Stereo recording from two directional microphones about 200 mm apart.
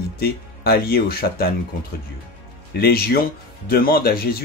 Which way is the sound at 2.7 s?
50° left (ahead or behind).